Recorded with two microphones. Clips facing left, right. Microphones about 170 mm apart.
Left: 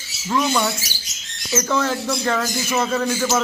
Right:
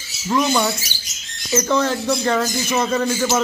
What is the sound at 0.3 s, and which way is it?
Speech, 5° right (ahead or behind).